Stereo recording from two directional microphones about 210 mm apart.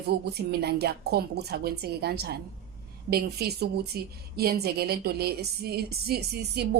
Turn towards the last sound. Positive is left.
turn(degrees=-50)  # may be behind; listen again after turning